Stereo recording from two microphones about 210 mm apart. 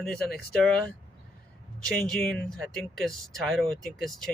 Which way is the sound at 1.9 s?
5° left (ahead or behind).